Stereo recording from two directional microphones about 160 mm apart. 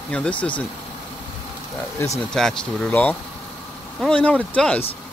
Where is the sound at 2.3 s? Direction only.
5° left (ahead or behind).